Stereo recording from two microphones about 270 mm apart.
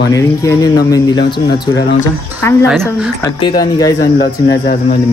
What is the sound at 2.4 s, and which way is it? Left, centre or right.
A woman's voice, centre.